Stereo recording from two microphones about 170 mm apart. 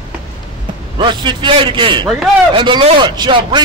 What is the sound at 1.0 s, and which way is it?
Speech, 25° right (ahead or behind).